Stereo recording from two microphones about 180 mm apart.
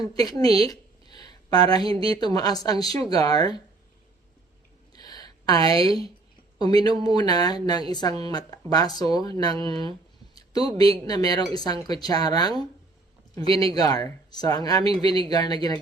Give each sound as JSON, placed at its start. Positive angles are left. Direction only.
{"t": 0.0, "sound": "speech", "side_deg": 20}
{"t": 0.7, "sound": "a sound", "side_deg": 20}
{"t": 2.0, "sound": "speech", "side_deg": 20}
{"t": 4.9, "sound": "a sound", "side_deg": 20}
{"t": 5.5, "sound": "a woman's voice", "side_deg": -30}
{"t": 6.6, "sound": "speech", "side_deg": 20}
{"t": 10.3, "sound": "a sound", "side_deg": 20}
{"t": 11.0, "sound": "speech", "side_deg": 20}
{"t": 13.7, "sound": "speech", "side_deg": 20}